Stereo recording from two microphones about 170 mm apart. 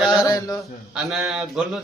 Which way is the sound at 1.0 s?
5° right (ahead or behind).